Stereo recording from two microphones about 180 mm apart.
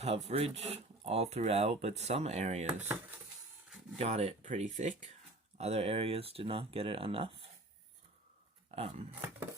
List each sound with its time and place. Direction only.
0.0 s speech: 35° right (ahead or behind)
3.9 s speech: 35° right (ahead or behind)
8.7 s speech: 35° right (ahead or behind)